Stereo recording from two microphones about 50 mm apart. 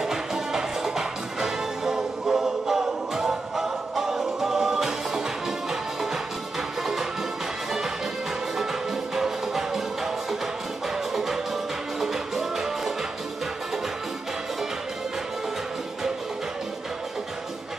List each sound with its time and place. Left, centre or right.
0.0 s music: centre
9.1 s music: centre
12.0 s music: centre